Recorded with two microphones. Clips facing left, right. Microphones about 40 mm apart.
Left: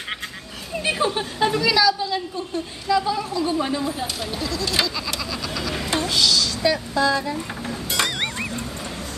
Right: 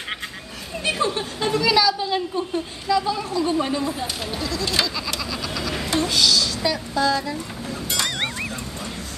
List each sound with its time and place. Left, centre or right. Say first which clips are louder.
0.8 s speech: even; centre
1.7 s a woman's voice: right 1 dB; centre
2.0 s a woman's voice: right 3 dB; right
2.9 s speech: even; centre
5.9 s a sound: right 1 dB; centre
6.6 s speech: left 2 dB; centre